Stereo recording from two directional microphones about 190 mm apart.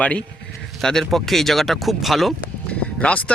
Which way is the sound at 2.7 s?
5° left (ahead or behind).